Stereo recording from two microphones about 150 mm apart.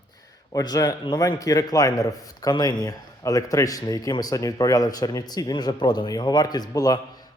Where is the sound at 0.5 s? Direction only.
25° left (ahead or behind).